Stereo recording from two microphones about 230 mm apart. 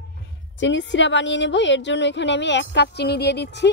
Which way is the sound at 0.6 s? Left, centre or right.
Left.